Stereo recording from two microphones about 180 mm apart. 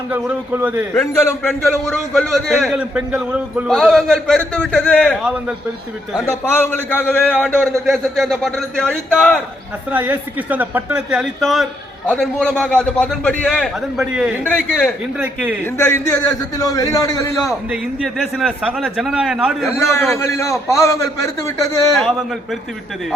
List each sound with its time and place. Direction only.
0.1 s a man's voice: 10° right (ahead or behind)
1.5 s speech: 5° left (ahead or behind)
6.1 s speech: 15° left (ahead or behind)
9.9 s a man's voice: 10° right (ahead or behind); by 17.3 s 20° left (ahead or behind)
17.4 s speech: 5° right (ahead or behind)
19.9 s a man's voice: 15° left (ahead or behind)